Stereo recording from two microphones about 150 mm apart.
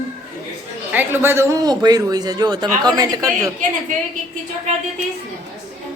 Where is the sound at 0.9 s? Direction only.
15° right (ahead or behind).